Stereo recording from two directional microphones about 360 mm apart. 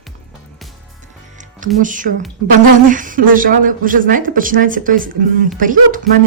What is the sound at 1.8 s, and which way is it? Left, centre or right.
Speech, right.